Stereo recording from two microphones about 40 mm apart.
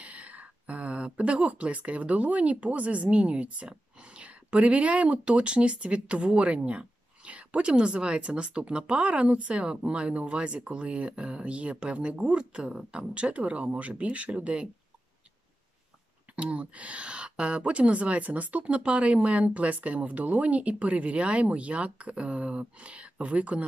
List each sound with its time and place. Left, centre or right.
0.0 s speech: right
13.1 s speech: right
16.3 s speech: right